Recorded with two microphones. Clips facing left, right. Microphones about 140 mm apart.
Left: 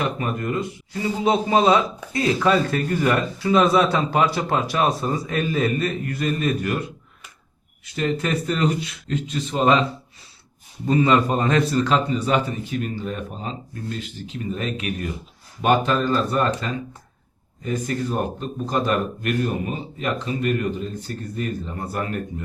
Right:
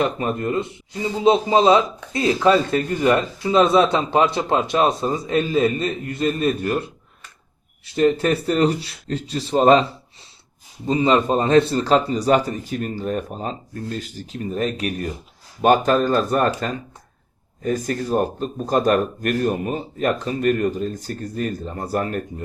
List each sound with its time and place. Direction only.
0.2 s speech: 25° right (ahead or behind)
7.9 s speech: 35° right (ahead or behind)
10.8 s speech: 25° right (ahead or behind); by 16.5 s 50° right (ahead or behind)
17.6 s speech: 40° right (ahead or behind)